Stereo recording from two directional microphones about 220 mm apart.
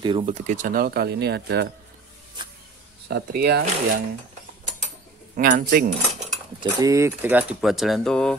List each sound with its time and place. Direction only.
0.0 s speech: 25° right (ahead or behind); by 1.7 s 45° right (ahead or behind)
3.1 s speech: 50° right (ahead or behind)
5.3 s speech: 35° right (ahead or behind)
6.8 s speech: 15° right (ahead or behind); by 8.4 s 5° left (ahead or behind)